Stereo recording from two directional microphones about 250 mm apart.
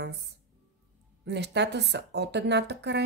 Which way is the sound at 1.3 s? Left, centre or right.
Right.